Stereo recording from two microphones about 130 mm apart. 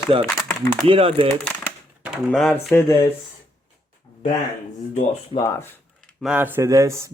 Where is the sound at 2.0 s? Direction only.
10° right (ahead or behind).